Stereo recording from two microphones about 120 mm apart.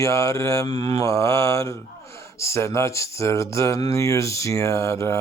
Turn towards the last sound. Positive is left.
turn(degrees=25)  # may be behind; listen again after turning